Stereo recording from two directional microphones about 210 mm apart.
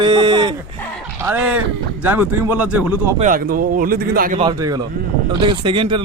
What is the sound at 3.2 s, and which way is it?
A man's voice, 40° right (ahead or behind).